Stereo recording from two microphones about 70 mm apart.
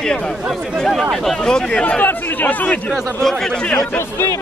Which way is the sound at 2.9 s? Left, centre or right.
Centre.